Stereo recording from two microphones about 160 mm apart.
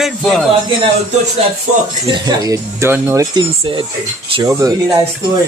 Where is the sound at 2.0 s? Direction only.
25° right (ahead or behind).